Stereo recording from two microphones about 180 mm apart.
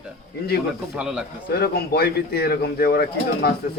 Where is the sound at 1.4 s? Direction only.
60° left (ahead or behind).